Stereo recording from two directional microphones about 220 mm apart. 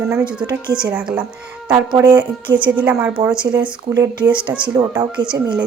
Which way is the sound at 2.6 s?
5° right (ahead or behind).